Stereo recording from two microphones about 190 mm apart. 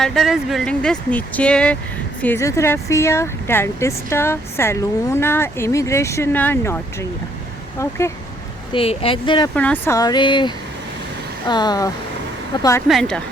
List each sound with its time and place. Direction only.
0.0 s speech: centre (ahead or behind)
8.7 s speech: 30° left (ahead or behind)
9.6 s speech: 10° left (ahead or behind)
12.9 s speech: centre (ahead or behind)